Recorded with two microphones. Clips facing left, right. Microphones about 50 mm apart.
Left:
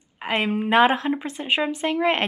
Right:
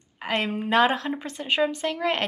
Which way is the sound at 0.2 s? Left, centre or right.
Centre.